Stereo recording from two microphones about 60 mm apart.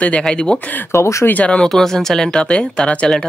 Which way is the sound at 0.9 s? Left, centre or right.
Left.